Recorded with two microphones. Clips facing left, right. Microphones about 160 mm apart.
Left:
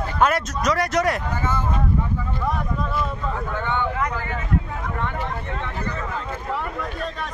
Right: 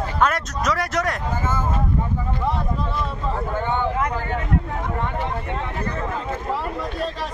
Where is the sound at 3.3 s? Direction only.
35° right (ahead or behind).